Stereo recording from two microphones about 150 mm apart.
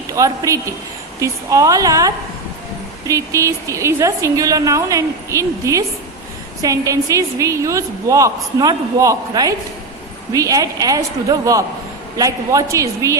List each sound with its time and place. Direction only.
0.1 s a woman's voice: 20° right (ahead or behind)